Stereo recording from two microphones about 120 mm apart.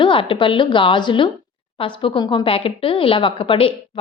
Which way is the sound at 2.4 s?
50° left (ahead or behind).